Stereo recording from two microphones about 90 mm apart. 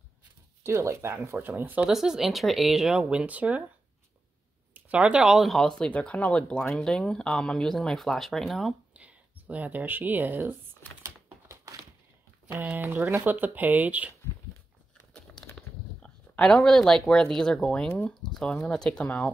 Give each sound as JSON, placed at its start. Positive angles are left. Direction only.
{"t": 0.7, "sound": "speech", "side_deg": -30}
{"t": 1.9, "sound": "speech", "side_deg": -5}
{"t": 4.7, "sound": "speech", "side_deg": -15}
{"t": 8.9, "sound": "speech", "side_deg": -15}
{"t": 10.8, "sound": "typing", "side_deg": 20}
{"t": 11.4, "sound": "a sound", "side_deg": -35}
{"t": 12.4, "sound": "speech", "side_deg": -20}
{"t": 15.3, "sound": "a sound", "side_deg": 10}
{"t": 18.7, "sound": "speech", "side_deg": 10}